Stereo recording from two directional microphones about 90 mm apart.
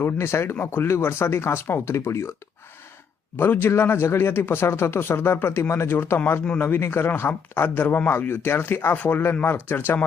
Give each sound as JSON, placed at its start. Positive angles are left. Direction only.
{"t": 0.0, "sound": "speech", "side_deg": 30}
{"t": 3.3, "sound": "speech", "side_deg": 25}